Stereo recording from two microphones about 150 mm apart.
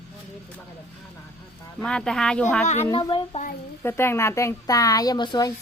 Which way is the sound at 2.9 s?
30° left (ahead or behind).